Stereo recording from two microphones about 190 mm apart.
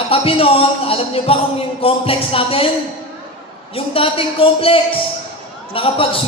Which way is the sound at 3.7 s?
30° left (ahead or behind).